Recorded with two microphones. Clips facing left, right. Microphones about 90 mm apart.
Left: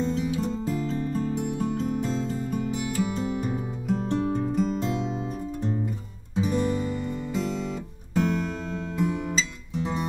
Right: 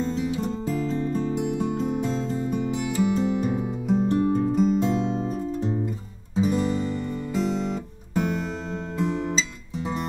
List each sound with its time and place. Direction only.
0.1 s music: centre (ahead or behind)
1.4 s music: 5° right (ahead or behind)
6.3 s guitar: 5° right (ahead or behind)
8.9 s guitar: centre (ahead or behind)